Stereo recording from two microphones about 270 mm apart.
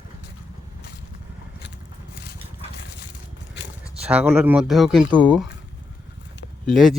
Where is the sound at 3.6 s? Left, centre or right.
Left.